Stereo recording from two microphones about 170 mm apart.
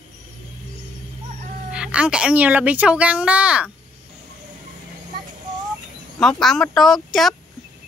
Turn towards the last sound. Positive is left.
turn(degrees=0)  # may be behind; listen again after turning